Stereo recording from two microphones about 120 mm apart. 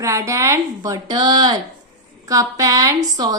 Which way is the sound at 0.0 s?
25° right (ahead or behind).